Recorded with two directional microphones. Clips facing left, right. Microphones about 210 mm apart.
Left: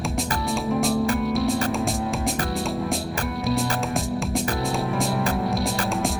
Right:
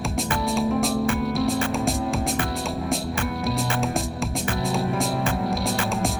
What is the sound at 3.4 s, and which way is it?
Music, centre (ahead or behind).